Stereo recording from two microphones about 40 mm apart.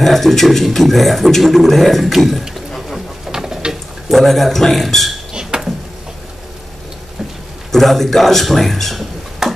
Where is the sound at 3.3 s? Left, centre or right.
Centre.